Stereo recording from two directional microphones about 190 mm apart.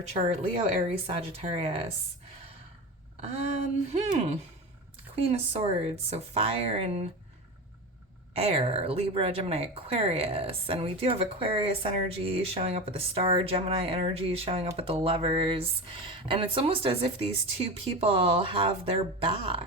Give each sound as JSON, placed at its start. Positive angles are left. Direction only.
{"t": 0.1, "sound": "speech", "side_deg": -30}
{"t": 3.9, "sound": "speech", "side_deg": -35}
{"t": 8.4, "sound": "speech", "side_deg": -30}